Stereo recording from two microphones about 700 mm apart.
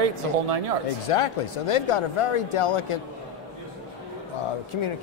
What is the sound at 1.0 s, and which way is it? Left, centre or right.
A man's voice, left.